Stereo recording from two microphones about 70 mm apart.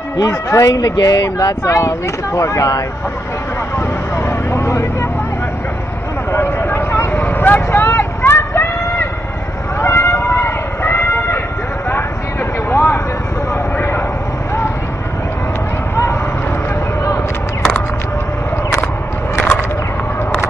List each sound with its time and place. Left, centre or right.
0.2 s speech: left
0.7 s speech: left
4.3 s vehicle: left
6.3 s vehicle: left
9.8 s a sound: left
12.7 s a sound: left